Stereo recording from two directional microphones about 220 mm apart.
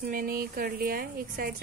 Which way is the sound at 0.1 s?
40° right (ahead or behind).